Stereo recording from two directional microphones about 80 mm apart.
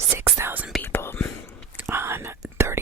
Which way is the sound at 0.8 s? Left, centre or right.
Left.